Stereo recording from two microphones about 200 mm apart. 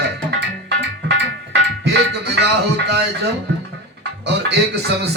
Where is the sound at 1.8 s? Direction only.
55° right (ahead or behind).